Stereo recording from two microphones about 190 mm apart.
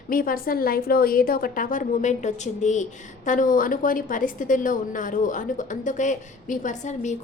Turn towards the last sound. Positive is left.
turn(degrees=40)  # may be behind; listen again after turning